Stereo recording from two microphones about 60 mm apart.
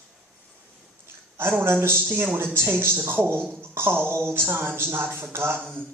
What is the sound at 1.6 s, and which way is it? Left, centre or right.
Speech, right.